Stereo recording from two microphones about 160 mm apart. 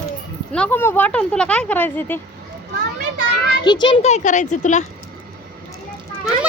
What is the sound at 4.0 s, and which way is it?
Speech, 45° left (ahead or behind).